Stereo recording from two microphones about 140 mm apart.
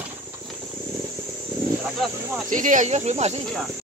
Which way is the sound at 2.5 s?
65° right (ahead or behind).